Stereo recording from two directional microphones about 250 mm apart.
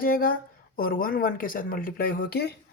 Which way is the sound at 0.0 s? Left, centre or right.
Left.